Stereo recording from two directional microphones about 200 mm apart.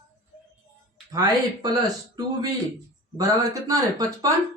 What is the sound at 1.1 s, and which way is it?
Speech, 20° right (ahead or behind).